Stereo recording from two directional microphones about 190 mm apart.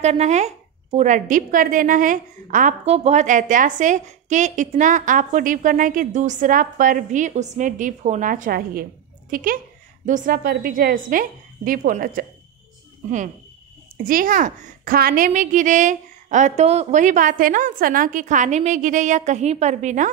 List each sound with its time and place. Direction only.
0.0 s a woman's voice: 35° right (ahead or behind)
13.9 s a woman's voice: 45° right (ahead or behind)